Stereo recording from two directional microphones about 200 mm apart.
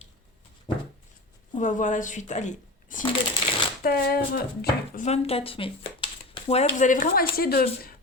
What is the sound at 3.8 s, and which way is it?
Speech, 50° left (ahead or behind).